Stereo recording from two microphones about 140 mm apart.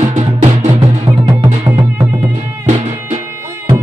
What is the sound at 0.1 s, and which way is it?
Music, 60° right (ahead or behind).